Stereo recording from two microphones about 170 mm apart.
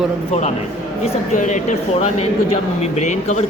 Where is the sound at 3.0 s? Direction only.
40° left (ahead or behind).